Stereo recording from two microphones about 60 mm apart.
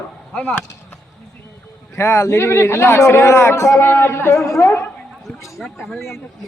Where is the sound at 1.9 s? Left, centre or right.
Left.